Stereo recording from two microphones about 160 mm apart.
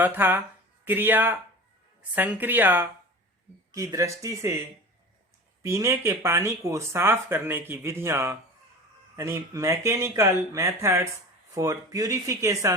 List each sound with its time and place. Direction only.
0.0 s speech: 10° right (ahead or behind)
5.6 s speech: 20° right (ahead or behind)